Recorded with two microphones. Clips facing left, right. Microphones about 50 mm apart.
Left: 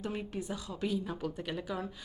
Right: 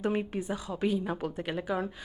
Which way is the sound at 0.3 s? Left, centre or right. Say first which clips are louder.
Right 5 dB; right.